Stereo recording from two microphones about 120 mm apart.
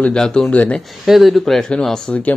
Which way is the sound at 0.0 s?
5° left (ahead or behind).